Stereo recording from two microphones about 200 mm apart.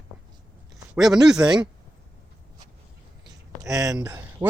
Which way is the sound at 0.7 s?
Centre (ahead or behind).